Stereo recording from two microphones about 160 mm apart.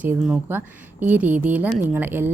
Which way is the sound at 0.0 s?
5° right (ahead or behind).